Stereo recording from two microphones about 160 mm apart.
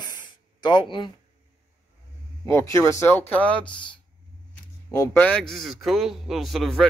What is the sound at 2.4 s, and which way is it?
Speech, 20° left (ahead or behind).